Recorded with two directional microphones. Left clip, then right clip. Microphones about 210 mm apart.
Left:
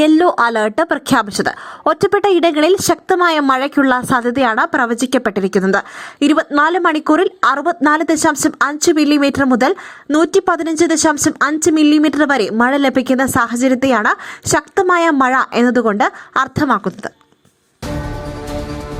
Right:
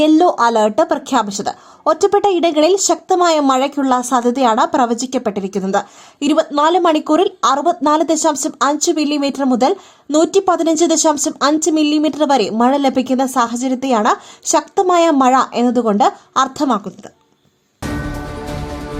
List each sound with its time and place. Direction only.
0.0 s a woman's voice: 20° left (ahead or behind)